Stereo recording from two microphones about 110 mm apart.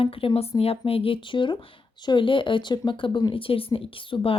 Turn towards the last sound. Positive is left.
turn(degrees=50)  # may be behind; listen again after turning